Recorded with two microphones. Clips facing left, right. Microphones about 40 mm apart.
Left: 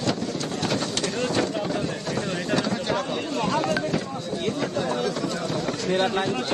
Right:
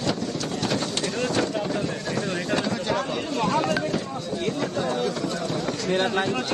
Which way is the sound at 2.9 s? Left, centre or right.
Right.